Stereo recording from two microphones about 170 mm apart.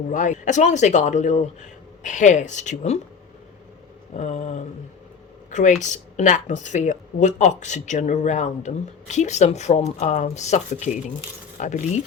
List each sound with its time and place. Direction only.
0.1 s speech: 45° left (ahead or behind)
4.2 s speech: 40° left (ahead or behind)